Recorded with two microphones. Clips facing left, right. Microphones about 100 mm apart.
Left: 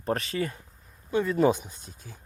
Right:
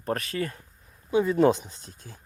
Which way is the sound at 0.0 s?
25° left (ahead or behind).